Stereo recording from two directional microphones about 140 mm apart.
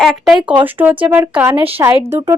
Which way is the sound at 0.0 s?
Centre (ahead or behind).